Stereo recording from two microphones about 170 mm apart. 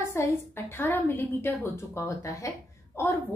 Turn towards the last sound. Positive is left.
turn(degrees=15)  # may be behind; listen again after turning